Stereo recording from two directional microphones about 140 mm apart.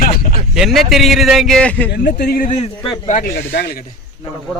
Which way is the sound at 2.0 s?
90° left.